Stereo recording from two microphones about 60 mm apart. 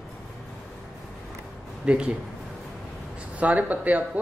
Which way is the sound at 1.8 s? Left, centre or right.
Centre.